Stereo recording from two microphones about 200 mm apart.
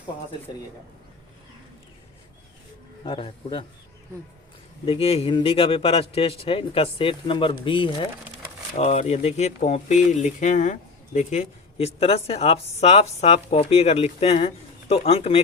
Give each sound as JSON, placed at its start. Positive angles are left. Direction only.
{"t": 3.0, "sound": "speech", "side_deg": 25}
{"t": 4.9, "sound": "speech", "side_deg": 30}